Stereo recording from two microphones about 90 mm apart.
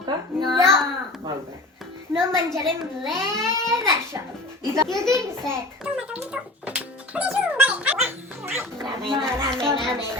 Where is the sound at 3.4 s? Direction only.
50° left (ahead or behind).